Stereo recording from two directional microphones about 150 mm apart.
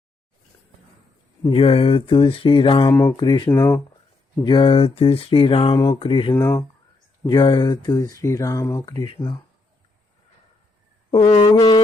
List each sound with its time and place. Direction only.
1.5 s mantra: 40° left (ahead or behind)
2.9 s speech: 15° left (ahead or behind)
3.2 s speech: 30° left (ahead or behind)
4.4 s mantra: 30° left (ahead or behind)
6.3 s speech: 15° left (ahead or behind)
7.3 s speech: 30° left (ahead or behind)
11.3 s speech: 25° left (ahead or behind)